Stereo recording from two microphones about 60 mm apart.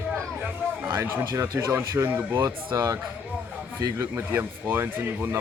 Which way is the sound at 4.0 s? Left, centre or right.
Right.